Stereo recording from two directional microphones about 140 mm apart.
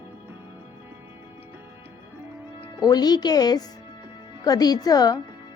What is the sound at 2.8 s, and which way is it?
A woman's voice, 30° left (ahead or behind).